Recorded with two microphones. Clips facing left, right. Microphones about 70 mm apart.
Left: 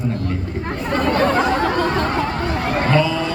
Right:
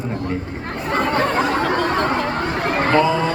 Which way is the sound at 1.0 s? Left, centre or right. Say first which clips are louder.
Left 1 dB; centre.